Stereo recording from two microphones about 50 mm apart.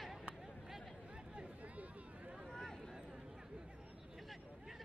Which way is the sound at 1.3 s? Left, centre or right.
Right.